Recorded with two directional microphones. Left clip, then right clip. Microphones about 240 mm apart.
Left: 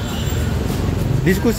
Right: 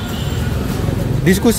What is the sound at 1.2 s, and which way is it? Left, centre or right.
Speech, centre.